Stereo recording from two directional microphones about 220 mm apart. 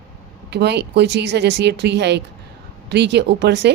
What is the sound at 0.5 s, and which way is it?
Speech, 50° right (ahead or behind).